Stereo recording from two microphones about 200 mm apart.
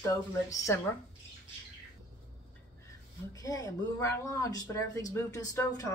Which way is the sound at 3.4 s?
15° left (ahead or behind).